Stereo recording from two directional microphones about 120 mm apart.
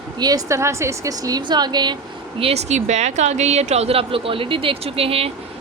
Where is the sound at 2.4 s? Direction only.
60° right (ahead or behind).